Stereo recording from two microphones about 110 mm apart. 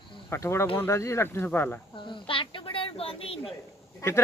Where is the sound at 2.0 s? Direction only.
45° left (ahead or behind).